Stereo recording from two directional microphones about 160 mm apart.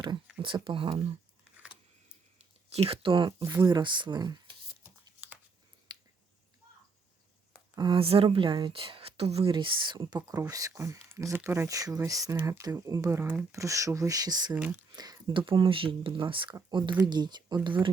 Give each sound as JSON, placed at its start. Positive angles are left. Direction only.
{"t": 0.4, "sound": "speech", "side_deg": -30}
{"t": 2.7, "sound": "speech", "side_deg": -35}
{"t": 3.4, "sound": "speech", "side_deg": -15}
{"t": 3.7, "sound": "speech", "side_deg": -30}
{"t": 5.9, "sound": "finger snapping", "side_deg": -25}
{"t": 7.8, "sound": "speech", "side_deg": -30}
{"t": 14.5, "sound": "speech", "side_deg": -10}
{"t": 14.9, "sound": "speech", "side_deg": -25}